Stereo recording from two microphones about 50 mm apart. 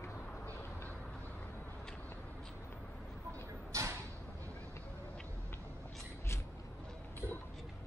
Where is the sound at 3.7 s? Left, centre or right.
Right.